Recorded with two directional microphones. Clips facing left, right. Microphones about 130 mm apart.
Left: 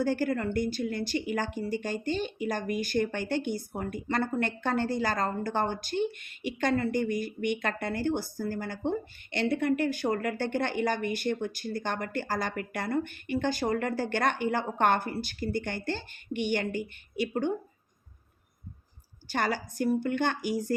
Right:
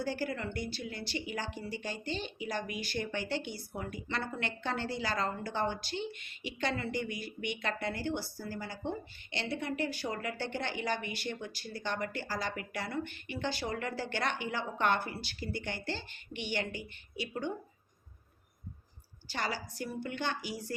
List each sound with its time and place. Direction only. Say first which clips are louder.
0.0 s speech: left 7 dB; 50° left (ahead or behind)
19.3 s speech: left 7 dB; 50° left (ahead or behind)